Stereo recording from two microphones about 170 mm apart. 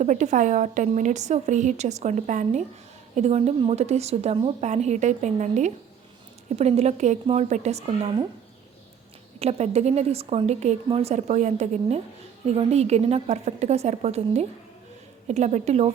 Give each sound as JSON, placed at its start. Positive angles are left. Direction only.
{"t": 0.0, "sound": "a woman's voice", "side_deg": -45}
{"t": 9.4, "sound": "speech", "side_deg": -40}